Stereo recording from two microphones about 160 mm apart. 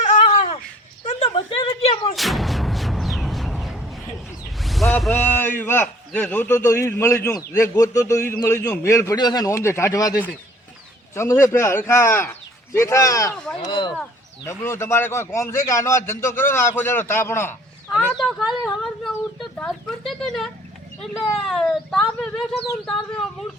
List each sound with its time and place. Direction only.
0.0 s a sound: 50° left (ahead or behind)
2.1 s artillery fire: centre (ahead or behind)
4.6 s a sound: centre (ahead or behind)
5.1 s a man's voice: 10° left (ahead or behind)
13.3 s speech: 5° left (ahead or behind)
13.7 s speech: 30° left (ahead or behind)
14.4 s a man's voice: 15° left (ahead or behind)
18.2 s a sound: centre (ahead or behind)
21.0 s speech: centre (ahead or behind)